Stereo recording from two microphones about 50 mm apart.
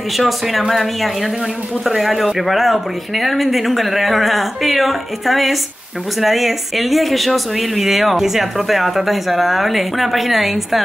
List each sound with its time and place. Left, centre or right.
0.2 s speech: centre